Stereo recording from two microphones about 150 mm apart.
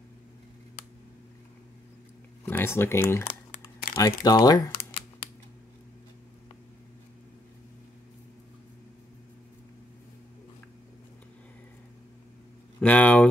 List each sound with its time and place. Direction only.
2.4 s speech: 15° left (ahead or behind)
4.7 s a sound: 35° left (ahead or behind)
12.8 s speech: 10° left (ahead or behind)